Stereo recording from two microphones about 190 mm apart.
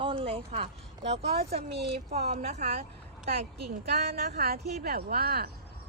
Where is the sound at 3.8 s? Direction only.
55° right (ahead or behind).